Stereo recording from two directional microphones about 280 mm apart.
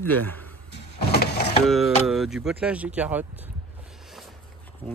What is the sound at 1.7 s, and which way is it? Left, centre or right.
Speech, centre.